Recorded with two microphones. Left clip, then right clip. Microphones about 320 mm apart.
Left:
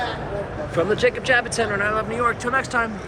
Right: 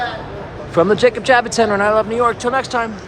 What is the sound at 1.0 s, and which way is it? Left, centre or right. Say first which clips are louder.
Speech: right 6 dB; right.